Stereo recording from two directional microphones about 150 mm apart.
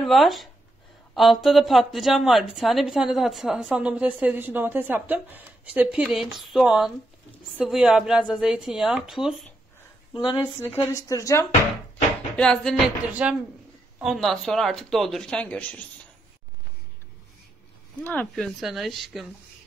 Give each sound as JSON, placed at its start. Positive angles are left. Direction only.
{"t": 0.0, "sound": "a woman's voice", "side_deg": 0}
{"t": 10.7, "sound": "a woman's voice", "side_deg": 20}
{"t": 12.4, "sound": "a woman's voice", "side_deg": 5}
{"t": 13.1, "sound": "speech", "side_deg": -10}
{"t": 14.0, "sound": "a woman's voice", "side_deg": 0}
{"t": 18.0, "sound": "a woman's voice", "side_deg": 10}